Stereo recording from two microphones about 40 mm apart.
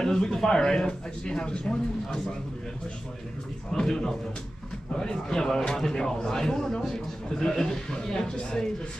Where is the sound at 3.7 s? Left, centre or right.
Centre.